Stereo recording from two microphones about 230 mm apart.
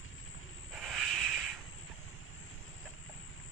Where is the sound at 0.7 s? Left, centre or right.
Centre.